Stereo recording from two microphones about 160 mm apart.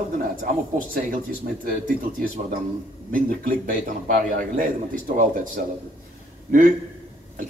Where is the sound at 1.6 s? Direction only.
60° right (ahead or behind).